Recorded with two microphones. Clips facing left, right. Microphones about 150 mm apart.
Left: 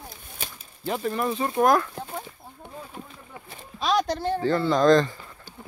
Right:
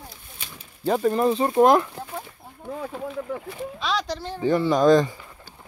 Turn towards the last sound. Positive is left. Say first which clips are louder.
# right 1 dB
turn(degrees=-10)  # may be behind; listen again after turning